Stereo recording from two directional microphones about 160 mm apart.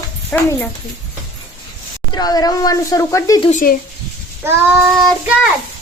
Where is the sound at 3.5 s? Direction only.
55° left (ahead or behind).